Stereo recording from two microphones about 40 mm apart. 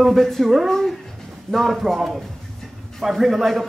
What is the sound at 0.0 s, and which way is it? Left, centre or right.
Speech, centre.